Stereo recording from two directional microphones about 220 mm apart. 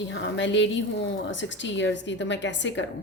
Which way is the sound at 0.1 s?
55° left (ahead or behind).